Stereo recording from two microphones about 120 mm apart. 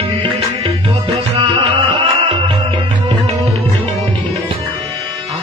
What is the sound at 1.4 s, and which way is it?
Music, 45° right (ahead or behind).